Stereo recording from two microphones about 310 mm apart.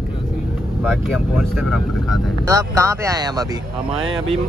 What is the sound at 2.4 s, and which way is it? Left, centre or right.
Speech, centre.